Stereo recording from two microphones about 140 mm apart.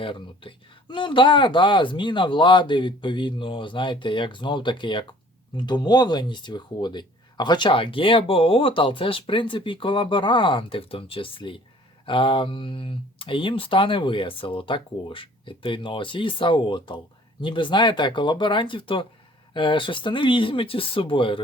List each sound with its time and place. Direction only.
0.0 s speech: 35° left (ahead or behind)